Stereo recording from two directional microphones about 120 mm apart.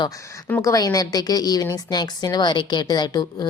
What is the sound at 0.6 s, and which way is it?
A woman's voice, 30° left (ahead or behind).